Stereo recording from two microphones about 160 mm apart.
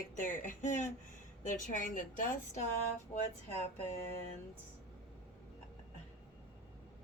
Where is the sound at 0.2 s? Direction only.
55° left (ahead or behind).